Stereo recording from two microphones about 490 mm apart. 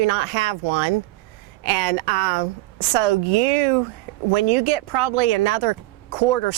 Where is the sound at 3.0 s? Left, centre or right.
Right.